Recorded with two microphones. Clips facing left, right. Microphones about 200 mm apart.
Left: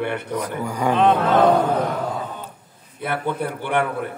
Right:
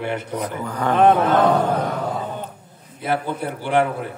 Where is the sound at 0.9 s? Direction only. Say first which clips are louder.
Right 3 dB; 50° right (ahead or behind).